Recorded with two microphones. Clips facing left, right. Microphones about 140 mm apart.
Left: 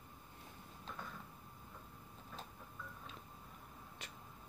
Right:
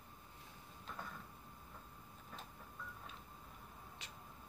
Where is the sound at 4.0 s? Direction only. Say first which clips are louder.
Left 2 dB; 50° left (ahead or behind).